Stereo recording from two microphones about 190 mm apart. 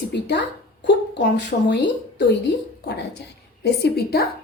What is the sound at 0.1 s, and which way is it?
A woman's voice, 60° left (ahead or behind).